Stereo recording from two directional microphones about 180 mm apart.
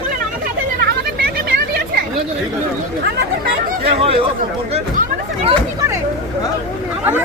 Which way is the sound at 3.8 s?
35° right (ahead or behind).